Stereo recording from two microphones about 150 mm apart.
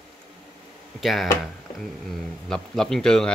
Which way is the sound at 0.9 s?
Centre (ahead or behind).